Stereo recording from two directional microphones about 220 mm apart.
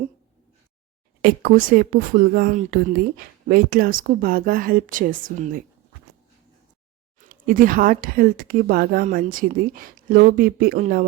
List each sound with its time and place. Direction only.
1.2 s a woman's voice: 40° right (ahead or behind)
7.2 s a woman's voice: 40° right (ahead or behind)